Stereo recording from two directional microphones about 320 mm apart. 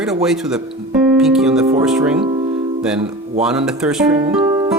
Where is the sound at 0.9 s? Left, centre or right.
Centre.